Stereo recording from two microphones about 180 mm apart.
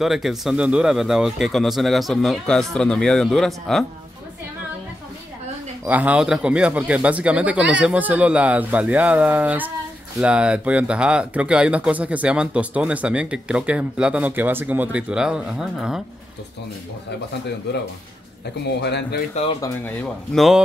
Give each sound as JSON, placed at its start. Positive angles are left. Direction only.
{"t": 0.0, "sound": "speech", "side_deg": 0}
{"t": 5.9, "sound": "speech", "side_deg": -10}
{"t": 18.8, "sound": "speech", "side_deg": 65}
{"t": 19.6, "sound": "speech", "side_deg": 10}